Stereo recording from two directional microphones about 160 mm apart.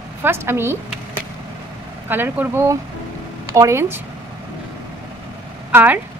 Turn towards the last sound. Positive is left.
turn(degrees=-10)  # may be behind; listen again after turning